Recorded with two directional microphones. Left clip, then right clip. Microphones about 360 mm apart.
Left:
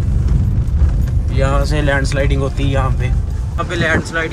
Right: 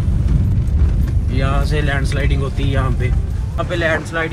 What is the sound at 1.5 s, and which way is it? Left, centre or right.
Speech, centre.